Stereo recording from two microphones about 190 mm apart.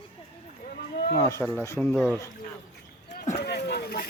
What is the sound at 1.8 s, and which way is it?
Speech, centre (ahead or behind).